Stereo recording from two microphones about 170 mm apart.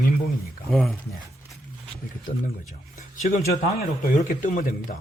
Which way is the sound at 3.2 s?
60° left (ahead or behind).